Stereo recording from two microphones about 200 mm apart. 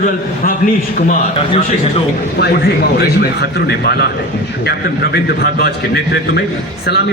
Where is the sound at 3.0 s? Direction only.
55° left (ahead or behind).